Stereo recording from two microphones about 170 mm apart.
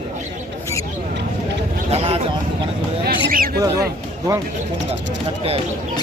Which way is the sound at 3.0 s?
55° right (ahead or behind).